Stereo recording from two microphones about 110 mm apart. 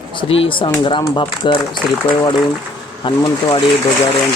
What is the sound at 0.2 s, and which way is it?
Speech, 55° left (ahead or behind).